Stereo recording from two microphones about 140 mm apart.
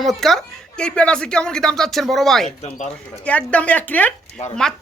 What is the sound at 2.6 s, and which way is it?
Speech, 60° left (ahead or behind).